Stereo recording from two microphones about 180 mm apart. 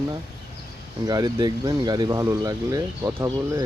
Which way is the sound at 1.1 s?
20° right (ahead or behind).